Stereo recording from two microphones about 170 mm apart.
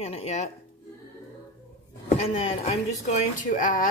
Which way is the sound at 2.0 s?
40° left (ahead or behind).